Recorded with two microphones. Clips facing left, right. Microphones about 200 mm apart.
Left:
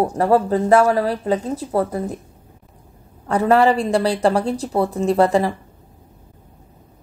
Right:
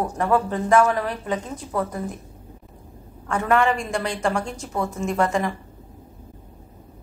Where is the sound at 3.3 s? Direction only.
35° left (ahead or behind).